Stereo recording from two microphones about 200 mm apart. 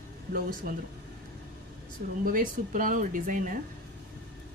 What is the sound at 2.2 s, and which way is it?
Speech, 40° right (ahead or behind).